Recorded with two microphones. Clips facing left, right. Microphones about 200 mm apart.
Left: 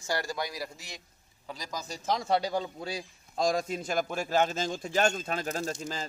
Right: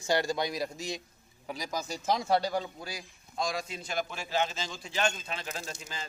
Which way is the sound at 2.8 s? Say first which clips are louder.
Left 6 dB; 30° left (ahead or behind).